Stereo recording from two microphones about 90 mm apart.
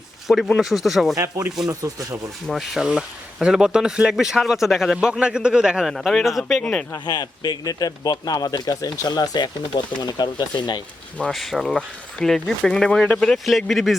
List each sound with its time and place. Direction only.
0.3 s speech: centre (ahead or behind)
1.1 s speech: 35° right (ahead or behind)
1.5 s speech: 5° right (ahead or behind)
1.8 s speech: 40° right (ahead or behind)
2.5 s speech: centre (ahead or behind)
6.6 s speech: 10° left (ahead or behind)
7.0 s speech: 50° left (ahead or behind)
11.3 s speech: centre (ahead or behind)